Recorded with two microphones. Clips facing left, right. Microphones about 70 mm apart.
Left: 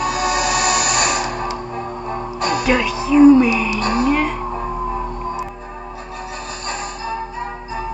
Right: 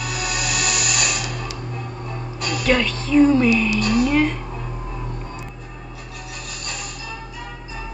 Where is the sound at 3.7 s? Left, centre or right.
Left.